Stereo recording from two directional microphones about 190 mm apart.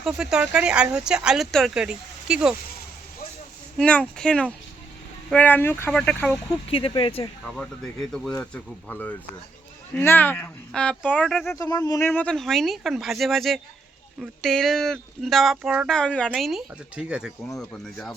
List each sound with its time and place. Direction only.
0.0 s speech: 5° right (ahead or behind)
3.8 s speech: 5° left (ahead or behind)
6.5 s speech: 30° left (ahead or behind)
7.4 s speech: 5° left (ahead or behind)
11.4 s speech: 15° left (ahead or behind)